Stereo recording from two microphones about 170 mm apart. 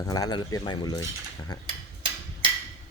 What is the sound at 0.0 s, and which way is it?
Speech, 20° left (ahead or behind).